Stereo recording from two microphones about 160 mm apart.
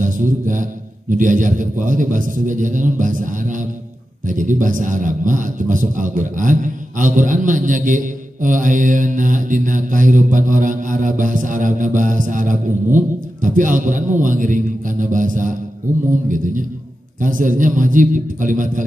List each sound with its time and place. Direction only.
0.0 s mantra: 55° right (ahead or behind)
1.1 s a man's voice: 55° right (ahead or behind)
17.2 s a man's voice: 55° right (ahead or behind)